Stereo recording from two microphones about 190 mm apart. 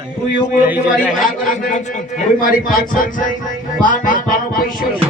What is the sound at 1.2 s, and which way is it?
Speech, 45° left (ahead or behind).